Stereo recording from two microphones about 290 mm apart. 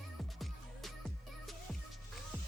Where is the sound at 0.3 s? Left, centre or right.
Centre.